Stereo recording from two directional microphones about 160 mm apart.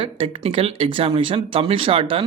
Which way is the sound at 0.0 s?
35° right (ahead or behind).